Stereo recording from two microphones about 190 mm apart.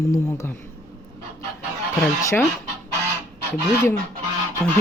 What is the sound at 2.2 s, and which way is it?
Speech, 15° left (ahead or behind).